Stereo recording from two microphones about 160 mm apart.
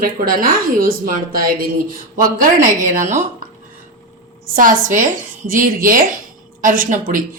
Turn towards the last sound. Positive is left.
turn(degrees=-60)  # may be behind; listen again after turning